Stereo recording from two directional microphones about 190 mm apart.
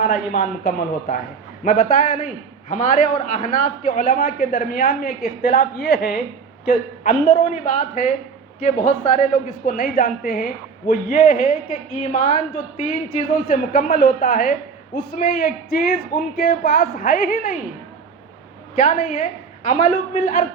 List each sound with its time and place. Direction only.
0.0 s a man's voice: 45° left (ahead or behind)
6.7 s a woman's voice: 45° left (ahead or behind)
9.6 s a man's voice: 50° left (ahead or behind)
18.8 s a woman's voice: 40° left (ahead or behind)